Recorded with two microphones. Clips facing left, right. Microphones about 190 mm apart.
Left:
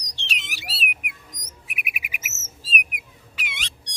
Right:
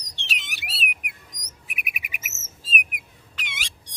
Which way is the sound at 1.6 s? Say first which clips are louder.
Left 1 dB; centre (ahead or behind).